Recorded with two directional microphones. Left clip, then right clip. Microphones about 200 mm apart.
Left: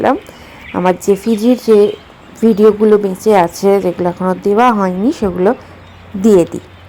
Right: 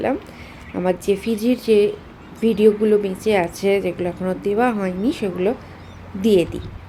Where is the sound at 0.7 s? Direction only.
15° left (ahead or behind).